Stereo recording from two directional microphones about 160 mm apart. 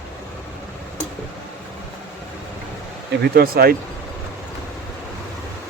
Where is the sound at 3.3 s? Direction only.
70° right (ahead or behind).